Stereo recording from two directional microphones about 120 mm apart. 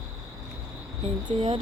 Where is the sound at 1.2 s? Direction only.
45° right (ahead or behind).